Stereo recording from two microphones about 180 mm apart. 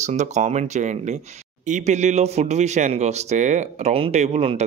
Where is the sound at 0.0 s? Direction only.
40° right (ahead or behind).